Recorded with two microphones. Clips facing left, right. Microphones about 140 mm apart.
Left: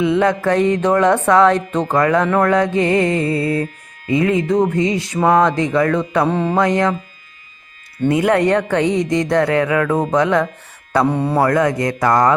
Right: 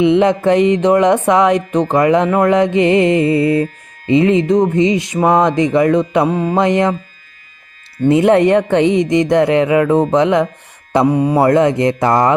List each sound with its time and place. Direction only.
0.0 s music: 20° right (ahead or behind)
6.6 s music: 20° right (ahead or behind)
8.0 s music: 25° right (ahead or behind)
11.0 s speech: 10° right (ahead or behind)
11.4 s music: 25° right (ahead or behind)